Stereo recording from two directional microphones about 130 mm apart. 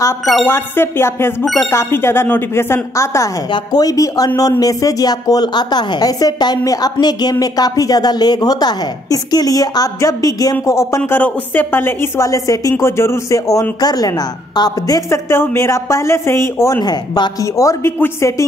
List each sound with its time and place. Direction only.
0.5 s music: 15° left (ahead or behind)
1.7 s a woman's voice: 20° left (ahead or behind)
11.0 s a woman's voice: 10° left (ahead or behind)
16.8 s a woman's voice: 30° left (ahead or behind)